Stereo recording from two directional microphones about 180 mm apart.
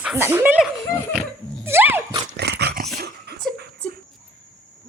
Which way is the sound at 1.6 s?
10° right (ahead or behind).